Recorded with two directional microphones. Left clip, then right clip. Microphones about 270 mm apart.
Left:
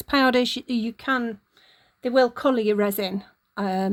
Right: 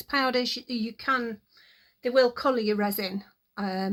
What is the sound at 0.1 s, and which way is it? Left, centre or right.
A woman's voice, left.